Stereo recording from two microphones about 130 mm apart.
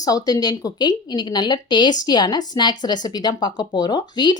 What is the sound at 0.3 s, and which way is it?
Speech, 30° left (ahead or behind).